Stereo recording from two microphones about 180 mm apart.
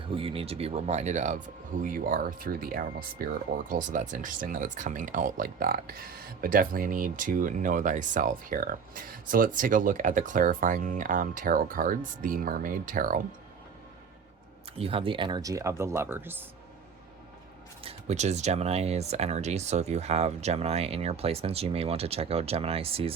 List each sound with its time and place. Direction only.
0.1 s speech: 30° right (ahead or behind); by 13.2 s 50° right (ahead or behind)
14.8 s speech: 30° right (ahead or behind); by 16.4 s 10° right (ahead or behind)
17.8 s speech: 40° right (ahead or behind)